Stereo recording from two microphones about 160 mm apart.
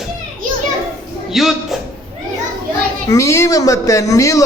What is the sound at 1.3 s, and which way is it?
Speech, centre (ahead or behind).